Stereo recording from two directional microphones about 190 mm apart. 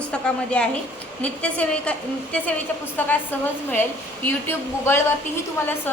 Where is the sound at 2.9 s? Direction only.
10° left (ahead or behind).